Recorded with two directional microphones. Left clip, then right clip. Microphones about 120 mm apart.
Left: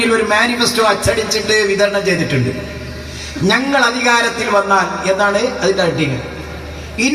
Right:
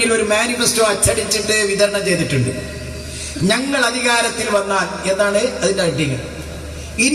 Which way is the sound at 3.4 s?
30° left (ahead or behind).